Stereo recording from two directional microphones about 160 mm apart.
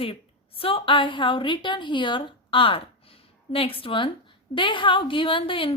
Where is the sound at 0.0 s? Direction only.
35° left (ahead or behind).